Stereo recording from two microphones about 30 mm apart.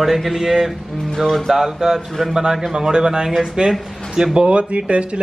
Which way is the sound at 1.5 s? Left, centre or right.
Centre.